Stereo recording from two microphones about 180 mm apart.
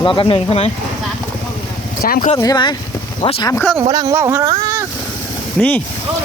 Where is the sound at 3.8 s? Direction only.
20° right (ahead or behind).